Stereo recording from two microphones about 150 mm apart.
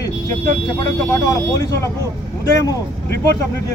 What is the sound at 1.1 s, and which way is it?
Speech, 20° left (ahead or behind).